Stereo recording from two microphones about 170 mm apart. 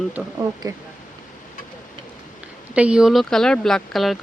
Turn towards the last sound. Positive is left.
turn(degrees=0)  # may be behind; listen again after turning